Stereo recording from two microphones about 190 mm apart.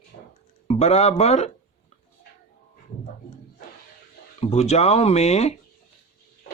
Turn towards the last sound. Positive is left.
turn(degrees=35)  # may be behind; listen again after turning